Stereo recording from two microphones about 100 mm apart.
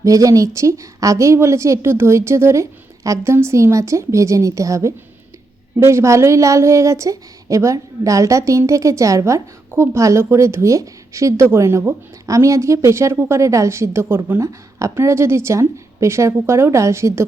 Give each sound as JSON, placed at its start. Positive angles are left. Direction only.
{"t": 0.0, "sound": "a woman's voice", "side_deg": -35}